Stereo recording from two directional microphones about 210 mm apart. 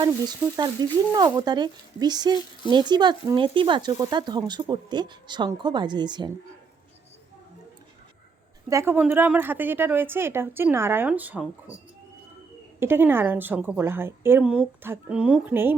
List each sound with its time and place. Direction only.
0.0 s speech: 20° right (ahead or behind)
8.7 s speech: 10° right (ahead or behind)
12.8 s speech: 10° right (ahead or behind)